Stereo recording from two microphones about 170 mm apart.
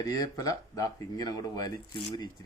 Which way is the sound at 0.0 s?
20° left (ahead or behind).